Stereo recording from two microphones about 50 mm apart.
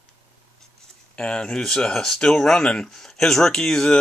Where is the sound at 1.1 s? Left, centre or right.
Centre.